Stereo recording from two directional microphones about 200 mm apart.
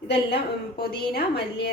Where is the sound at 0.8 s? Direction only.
55° left (ahead or behind).